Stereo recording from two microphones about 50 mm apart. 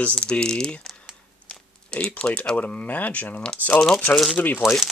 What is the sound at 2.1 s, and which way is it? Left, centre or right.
Speech, centre.